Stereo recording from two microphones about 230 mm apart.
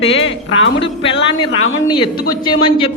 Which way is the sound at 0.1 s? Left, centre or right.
Left.